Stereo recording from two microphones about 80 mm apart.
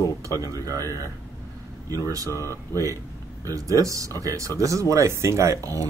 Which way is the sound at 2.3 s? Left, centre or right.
Left.